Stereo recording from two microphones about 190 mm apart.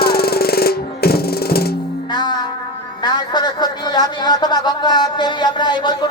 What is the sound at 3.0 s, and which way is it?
A man's voice, 20° left (ahead or behind).